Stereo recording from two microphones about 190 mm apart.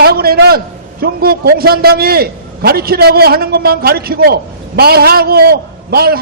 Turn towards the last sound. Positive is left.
turn(degrees=-55)  # may be behind; listen again after turning